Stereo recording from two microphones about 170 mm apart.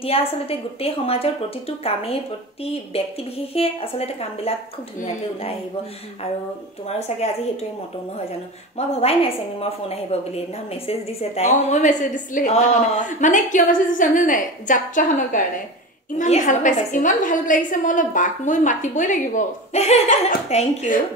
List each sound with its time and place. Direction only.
0.0 s a woman's voice: 35° left (ahead or behind)
2.6 s a woman's voice: 35° left (ahead or behind)
8.7 s a woman's voice: 35° left (ahead or behind)